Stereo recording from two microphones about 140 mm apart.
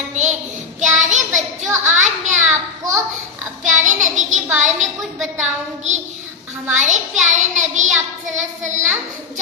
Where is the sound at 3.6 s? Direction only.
60° right (ahead or behind).